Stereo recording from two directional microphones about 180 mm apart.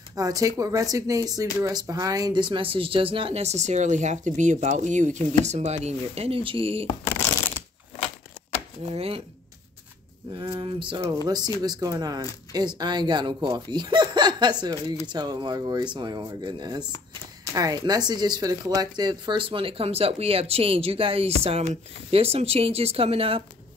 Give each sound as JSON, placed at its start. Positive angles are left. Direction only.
{"t": 0.1, "sound": "speech", "side_deg": -20}
{"t": 8.9, "sound": "speech", "side_deg": -30}
{"t": 10.3, "sound": "speech", "side_deg": -30}